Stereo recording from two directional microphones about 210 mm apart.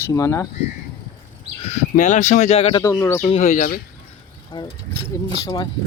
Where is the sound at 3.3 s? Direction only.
35° left (ahead or behind).